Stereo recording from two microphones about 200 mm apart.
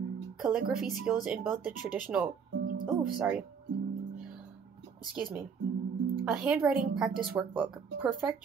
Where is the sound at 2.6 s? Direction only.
45° right (ahead or behind).